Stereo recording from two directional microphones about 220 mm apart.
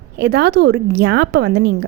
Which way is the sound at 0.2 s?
50° right (ahead or behind).